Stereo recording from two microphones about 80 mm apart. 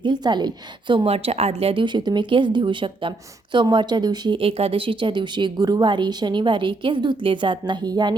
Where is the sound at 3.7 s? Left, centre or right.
Right.